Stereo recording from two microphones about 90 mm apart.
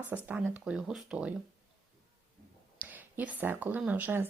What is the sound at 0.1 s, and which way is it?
Speech, 15° right (ahead or behind).